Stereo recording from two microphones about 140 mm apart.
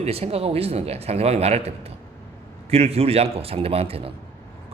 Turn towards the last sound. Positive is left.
turn(degrees=-45)  # may be behind; listen again after turning